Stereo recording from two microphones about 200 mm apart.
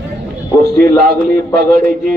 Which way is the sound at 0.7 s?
45° right (ahead or behind).